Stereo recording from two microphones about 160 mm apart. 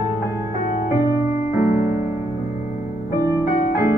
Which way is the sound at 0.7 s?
50° left (ahead or behind).